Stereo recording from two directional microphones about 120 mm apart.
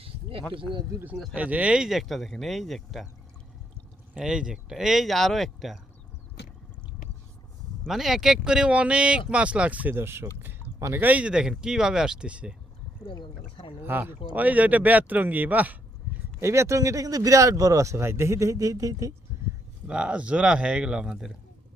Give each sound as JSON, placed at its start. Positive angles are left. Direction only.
{"t": 0.0, "sound": "a sound", "side_deg": -50}
{"t": 0.5, "sound": "speech", "side_deg": -45}
{"t": 1.1, "sound": "speech", "side_deg": 0}
{"t": 1.4, "sound": "speech", "side_deg": -10}
{"t": 4.1, "sound": "speech", "side_deg": -5}
{"t": 7.9, "sound": "speech", "side_deg": 0}
{"t": 10.4, "sound": "a sound", "side_deg": -20}
{"t": 11.0, "sound": "speech", "side_deg": -10}
{"t": 13.0, "sound": "speech", "side_deg": 30}
{"t": 13.8, "sound": "speech", "side_deg": -15}
{"t": 16.1, "sound": "a sound", "side_deg": -15}
{"t": 16.4, "sound": "speech", "side_deg": -25}
{"t": 19.9, "sound": "speech", "side_deg": -10}